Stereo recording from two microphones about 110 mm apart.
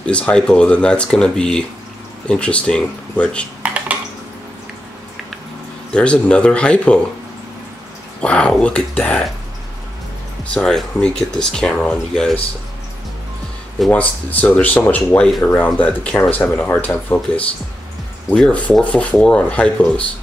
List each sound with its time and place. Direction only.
0.0 s speech: 10° left (ahead or behind)
3.6 s a sound: 10° right (ahead or behind)
5.9 s speech: 10° left (ahead or behind)
8.2 s speech: 10° left (ahead or behind)
10.5 s speech: 5° left (ahead or behind)
13.8 s speech: 15° left (ahead or behind)